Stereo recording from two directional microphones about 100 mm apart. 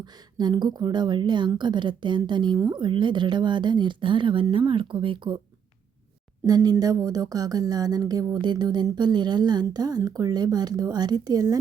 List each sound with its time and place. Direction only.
0.0 s a woman's voice: 45° right (ahead or behind)
6.4 s speech: 40° right (ahead or behind)